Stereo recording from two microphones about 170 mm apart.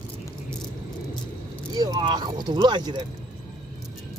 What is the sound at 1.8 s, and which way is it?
Speech, 25° right (ahead or behind).